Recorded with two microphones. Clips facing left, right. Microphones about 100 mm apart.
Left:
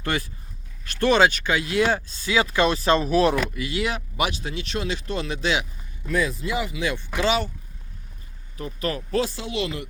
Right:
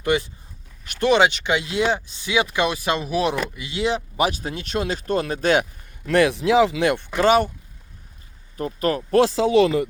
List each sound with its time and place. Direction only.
0.0 s speech: 15° right (ahead or behind)
4.3 s speech: 45° right (ahead or behind)
6.1 s speech: 80° right; by 7.5 s 50° right (ahead or behind)
8.5 s speech: 40° right (ahead or behind)
9.1 s speech: 90° right